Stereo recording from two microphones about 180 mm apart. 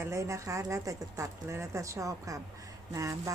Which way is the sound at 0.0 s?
15° right (ahead or behind).